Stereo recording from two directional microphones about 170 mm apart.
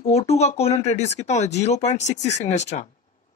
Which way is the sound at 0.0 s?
35° left (ahead or behind).